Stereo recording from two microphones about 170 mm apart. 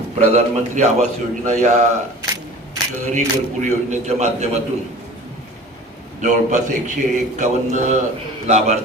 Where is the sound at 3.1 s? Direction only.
45° right (ahead or behind).